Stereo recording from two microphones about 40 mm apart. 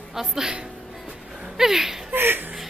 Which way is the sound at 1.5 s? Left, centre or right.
Centre.